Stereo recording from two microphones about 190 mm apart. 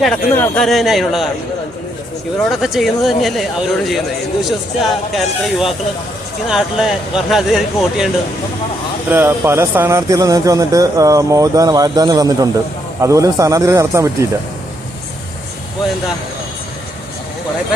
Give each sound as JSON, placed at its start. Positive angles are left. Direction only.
{"t": 0.0, "sound": "speech", "side_deg": 5}
{"t": 2.4, "sound": "speech", "side_deg": 0}
{"t": 9.0, "sound": "speech", "side_deg": -10}